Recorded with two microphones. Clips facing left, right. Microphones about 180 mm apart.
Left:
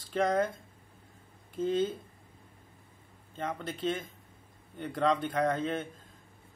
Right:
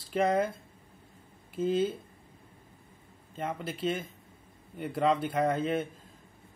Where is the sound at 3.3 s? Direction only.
10° right (ahead or behind).